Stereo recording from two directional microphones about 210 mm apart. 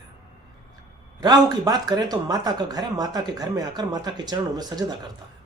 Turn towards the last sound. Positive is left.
turn(degrees=-20)  # may be behind; listen again after turning